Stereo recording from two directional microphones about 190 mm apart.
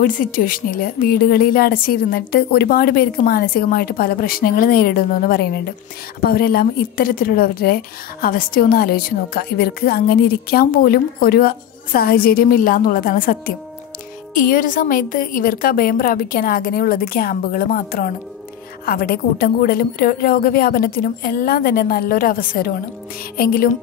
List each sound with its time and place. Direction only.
0.0 s a woman's voice: 45° left (ahead or behind)